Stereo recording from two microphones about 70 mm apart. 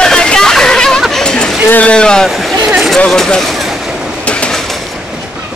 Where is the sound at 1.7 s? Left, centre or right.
Centre.